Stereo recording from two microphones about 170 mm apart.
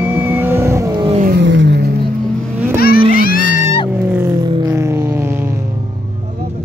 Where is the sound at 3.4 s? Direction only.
90° right.